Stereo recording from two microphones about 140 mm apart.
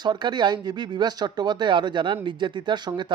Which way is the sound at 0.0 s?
30° right (ahead or behind).